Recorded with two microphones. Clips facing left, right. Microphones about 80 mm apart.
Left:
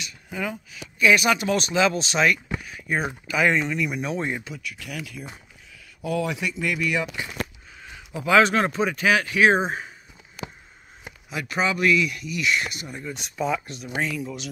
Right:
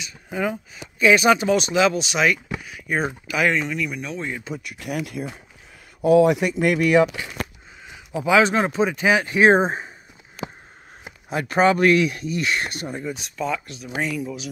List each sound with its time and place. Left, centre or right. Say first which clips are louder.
0.0 s speech: right 5 dB; centre
3.4 s speech: even; centre
4.1 s speech: left 2 dB; left
4.6 s speech: right 6 dB; right
8.3 s speech: right 1 dB; centre; by 9.8 s right
11.2 s speech: right 7 dB; right
13.4 s speech: left 1 dB; centre
14.0 s speech: right 2 dB; centre